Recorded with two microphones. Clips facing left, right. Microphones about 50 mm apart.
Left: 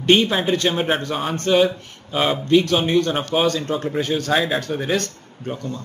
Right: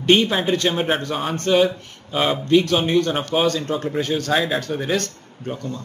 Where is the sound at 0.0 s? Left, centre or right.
Centre.